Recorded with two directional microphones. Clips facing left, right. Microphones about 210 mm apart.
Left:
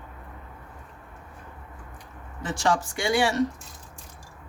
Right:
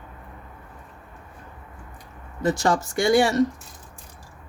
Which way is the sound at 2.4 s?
40° right (ahead or behind).